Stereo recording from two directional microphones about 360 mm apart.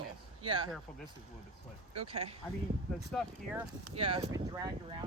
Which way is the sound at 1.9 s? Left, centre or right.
Right.